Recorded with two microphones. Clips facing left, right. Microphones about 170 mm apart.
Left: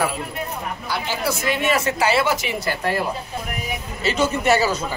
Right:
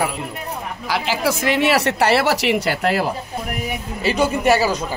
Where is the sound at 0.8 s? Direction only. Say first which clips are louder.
Right 5 dB; 90° right.